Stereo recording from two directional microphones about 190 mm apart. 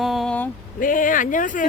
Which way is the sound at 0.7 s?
45° left (ahead or behind).